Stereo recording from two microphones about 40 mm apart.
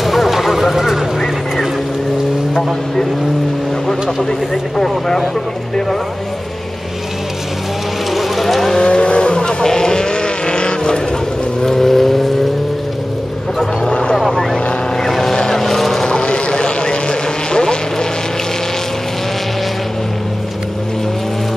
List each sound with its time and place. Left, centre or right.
0.0 s a sound: centre
3.8 s vehicle: centre
8.1 s a sound: centre
8.7 s vehicle: left
11.6 s vehicle: centre
13.8 s vehicle: left
14.3 s vehicle: centre
16.1 s vehicle: left